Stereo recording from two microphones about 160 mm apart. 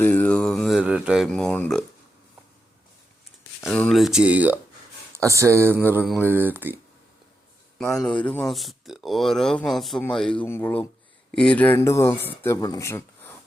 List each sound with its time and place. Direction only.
0.0 s a sound: 10° left (ahead or behind)
3.7 s speech: 5° left (ahead or behind); by 6.7 s 10° right (ahead or behind)
7.8 s speech: 5° left (ahead or behind)